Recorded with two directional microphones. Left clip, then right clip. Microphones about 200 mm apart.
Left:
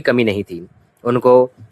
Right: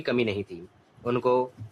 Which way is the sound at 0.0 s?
40° left (ahead or behind).